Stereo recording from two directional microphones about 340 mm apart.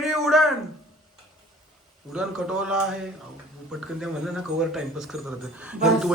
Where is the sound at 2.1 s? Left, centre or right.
Centre.